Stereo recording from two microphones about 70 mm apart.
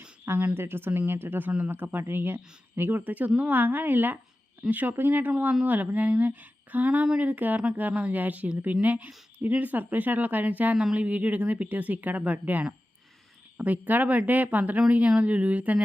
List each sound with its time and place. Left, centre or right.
0.5 s speech: right